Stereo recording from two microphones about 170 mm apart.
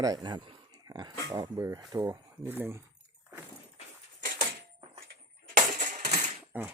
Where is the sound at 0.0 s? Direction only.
25° right (ahead or behind).